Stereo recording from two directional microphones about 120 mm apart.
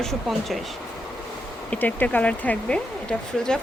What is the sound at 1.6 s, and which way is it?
A woman's voice, 15° left (ahead or behind).